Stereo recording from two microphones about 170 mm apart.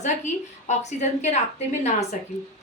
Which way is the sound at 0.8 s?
40° left (ahead or behind).